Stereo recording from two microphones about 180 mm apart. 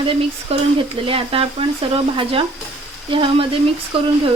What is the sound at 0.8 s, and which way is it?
Speech, 30° right (ahead or behind).